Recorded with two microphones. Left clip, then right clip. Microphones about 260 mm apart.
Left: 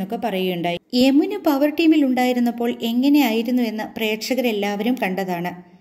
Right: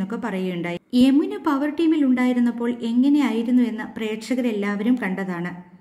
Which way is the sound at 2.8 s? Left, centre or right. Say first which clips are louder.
Left 2 dB; centre.